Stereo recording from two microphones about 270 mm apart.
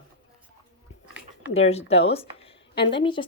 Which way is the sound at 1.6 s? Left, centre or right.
Left.